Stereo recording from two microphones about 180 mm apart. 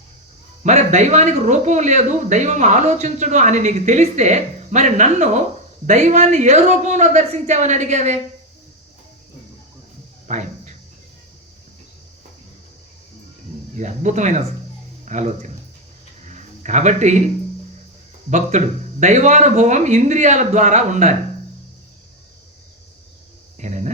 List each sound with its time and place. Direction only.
0.6 s speech: 40° right (ahead or behind)
10.2 s a sound: 40° right (ahead or behind)
13.7 s speech: 40° right (ahead or behind)
16.3 s a sound: 40° right (ahead or behind)
18.3 s speech: 40° right (ahead or behind)
23.6 s cricket: 40° right (ahead or behind)